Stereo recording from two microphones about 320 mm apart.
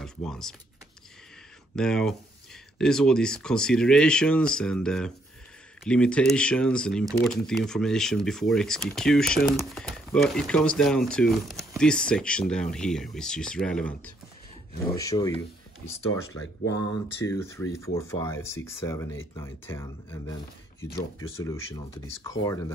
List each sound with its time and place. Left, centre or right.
0.0 s speech: centre
1.8 s speech: centre
16.6 s speech: left
17.2 s speech: centre